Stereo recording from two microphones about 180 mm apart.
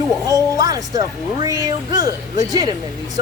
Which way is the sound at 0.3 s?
20° right (ahead or behind).